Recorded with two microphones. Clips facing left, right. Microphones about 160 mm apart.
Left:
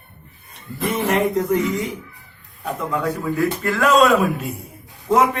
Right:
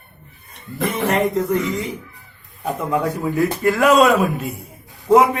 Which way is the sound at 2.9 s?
15° right (ahead or behind).